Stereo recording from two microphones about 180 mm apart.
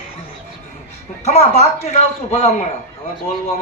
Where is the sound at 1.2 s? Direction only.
35° left (ahead or behind).